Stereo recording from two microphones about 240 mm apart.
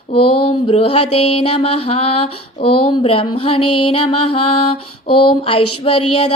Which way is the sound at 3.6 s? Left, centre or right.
Left.